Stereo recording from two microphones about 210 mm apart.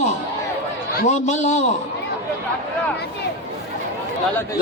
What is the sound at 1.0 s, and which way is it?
Speech, 35° left (ahead or behind).